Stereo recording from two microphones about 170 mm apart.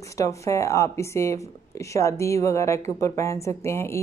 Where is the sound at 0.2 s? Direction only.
20° left (ahead or behind).